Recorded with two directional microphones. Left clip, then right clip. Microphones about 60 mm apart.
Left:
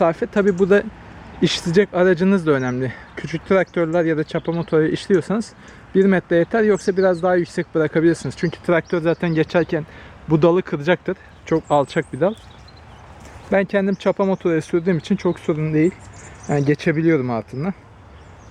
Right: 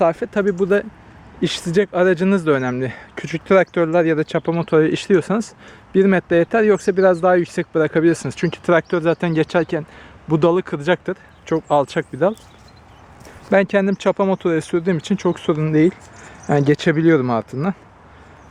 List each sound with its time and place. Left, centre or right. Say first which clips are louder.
0.0 s speech: even; centre
13.5 s speech: right 3 dB; right
14.0 s speech: right 1 dB; right
15.5 s speech: right 3 dB; right
16.5 s speech: right 3 dB; right